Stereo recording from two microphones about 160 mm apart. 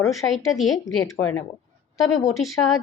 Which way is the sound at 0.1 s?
Centre (ahead or behind).